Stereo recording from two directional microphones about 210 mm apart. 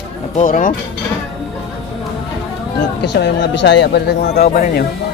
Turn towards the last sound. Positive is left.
turn(degrees=45)  # may be behind; listen again after turning